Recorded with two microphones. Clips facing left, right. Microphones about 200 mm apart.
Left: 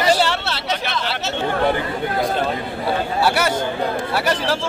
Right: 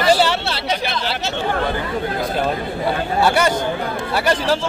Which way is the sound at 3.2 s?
5° left (ahead or behind).